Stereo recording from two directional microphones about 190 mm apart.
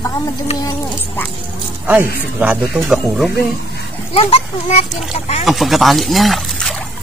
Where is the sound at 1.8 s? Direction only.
10° right (ahead or behind).